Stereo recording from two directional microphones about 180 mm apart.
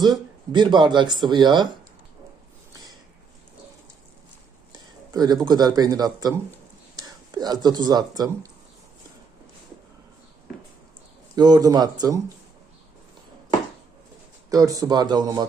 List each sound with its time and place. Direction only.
0.0 s speech: 25° right (ahead or behind)
4.7 s speech: 20° right (ahead or behind)
11.3 s speech: 20° right (ahead or behind)
14.5 s speech: 20° right (ahead or behind)